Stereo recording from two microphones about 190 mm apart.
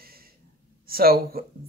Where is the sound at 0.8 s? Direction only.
50° right (ahead or behind).